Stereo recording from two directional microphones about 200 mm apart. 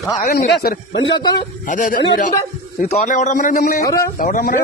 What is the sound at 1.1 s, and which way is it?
Speech, 20° left (ahead or behind).